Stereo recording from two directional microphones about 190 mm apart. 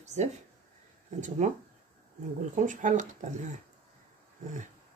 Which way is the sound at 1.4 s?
40° right (ahead or behind).